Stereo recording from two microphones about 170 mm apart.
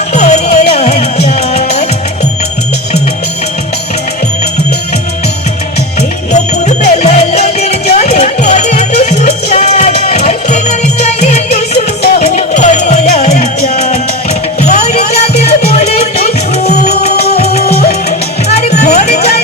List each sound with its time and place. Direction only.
0.1 s music: 45° left (ahead or behind)
6.3 s music: 40° left (ahead or behind)